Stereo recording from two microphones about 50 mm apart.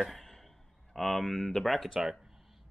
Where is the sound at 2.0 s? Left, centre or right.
Centre.